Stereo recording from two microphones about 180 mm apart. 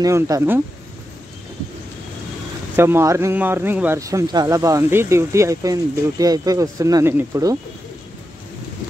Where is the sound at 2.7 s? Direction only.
15° right (ahead or behind).